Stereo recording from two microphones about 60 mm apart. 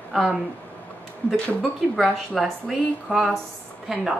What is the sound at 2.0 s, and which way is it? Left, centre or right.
Speech, centre.